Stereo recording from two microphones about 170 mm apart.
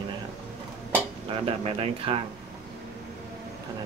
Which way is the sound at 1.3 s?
35° right (ahead or behind).